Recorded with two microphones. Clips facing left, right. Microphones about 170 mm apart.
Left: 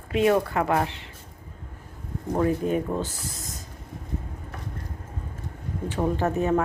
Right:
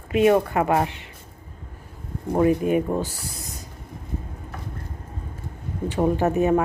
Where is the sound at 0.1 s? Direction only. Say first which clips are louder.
Right 3 dB; 15° right (ahead or behind).